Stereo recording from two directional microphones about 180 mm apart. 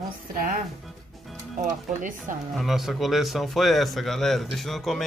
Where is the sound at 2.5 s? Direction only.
Centre (ahead or behind).